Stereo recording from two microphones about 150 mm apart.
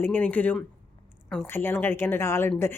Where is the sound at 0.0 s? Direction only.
10° left (ahead or behind).